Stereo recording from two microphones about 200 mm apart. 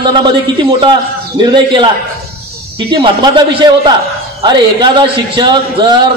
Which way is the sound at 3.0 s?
20° right (ahead or behind).